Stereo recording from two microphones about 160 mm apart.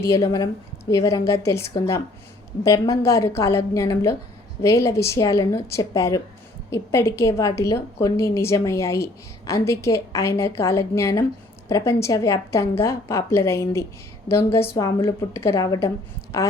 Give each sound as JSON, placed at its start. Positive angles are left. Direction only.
{"t": 0.0, "sound": "a woman's voice", "side_deg": 20}